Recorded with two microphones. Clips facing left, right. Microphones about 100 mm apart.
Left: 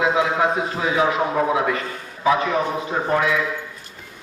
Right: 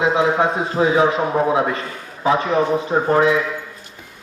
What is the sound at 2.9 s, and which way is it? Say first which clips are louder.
Speech: right 6 dB; 30° right (ahead or behind).